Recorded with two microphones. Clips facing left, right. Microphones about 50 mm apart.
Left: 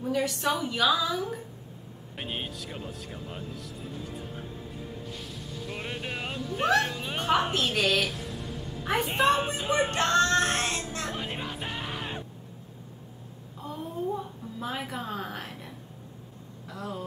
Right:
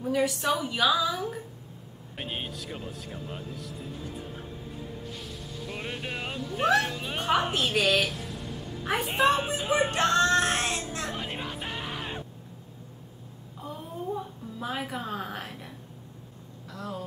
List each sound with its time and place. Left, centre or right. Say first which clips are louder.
0.1 s a woman's voice: right 2 dB; centre
5.7 s speech: even; centre
8.8 s a sound: even; centre
14.6 s speech: right 1 dB; centre